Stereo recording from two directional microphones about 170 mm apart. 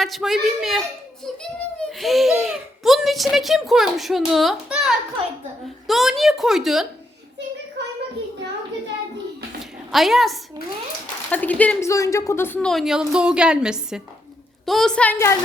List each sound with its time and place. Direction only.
0.0 s a child's voice: centre (ahead or behind)
7.8 s a sound: 90° right
9.9 s a child's voice: centre (ahead or behind); by 12.5 s 15° left (ahead or behind)
12.5 s a child's voice: centre (ahead or behind)